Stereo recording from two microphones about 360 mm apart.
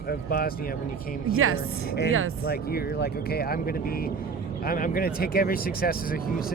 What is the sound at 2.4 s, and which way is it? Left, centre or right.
Speech, left.